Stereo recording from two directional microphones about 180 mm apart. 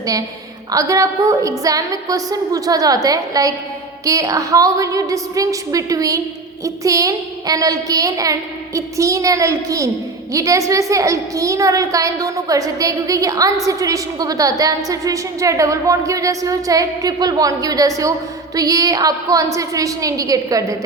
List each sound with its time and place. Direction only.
0.7 s a woman's voice: 20° right (ahead or behind)